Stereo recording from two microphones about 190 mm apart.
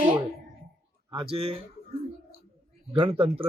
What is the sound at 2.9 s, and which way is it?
Speech, 30° right (ahead or behind).